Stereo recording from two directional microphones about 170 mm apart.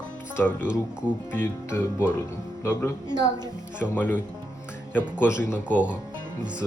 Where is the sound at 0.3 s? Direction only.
10° left (ahead or behind).